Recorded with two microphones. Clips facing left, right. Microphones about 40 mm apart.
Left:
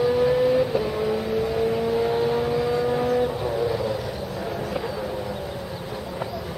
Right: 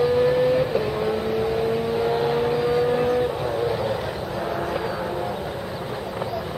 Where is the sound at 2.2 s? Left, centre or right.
Right.